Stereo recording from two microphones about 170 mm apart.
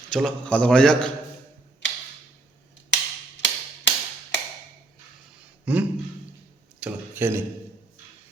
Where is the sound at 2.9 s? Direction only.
90° left.